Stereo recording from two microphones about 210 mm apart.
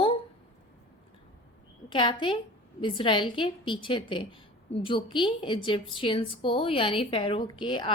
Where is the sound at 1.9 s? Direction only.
25° left (ahead or behind).